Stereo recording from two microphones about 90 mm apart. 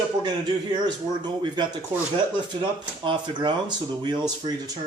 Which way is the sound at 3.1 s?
55° right (ahead or behind).